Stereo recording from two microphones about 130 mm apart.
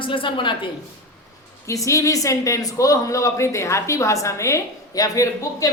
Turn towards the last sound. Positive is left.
turn(degrees=25)  # may be behind; listen again after turning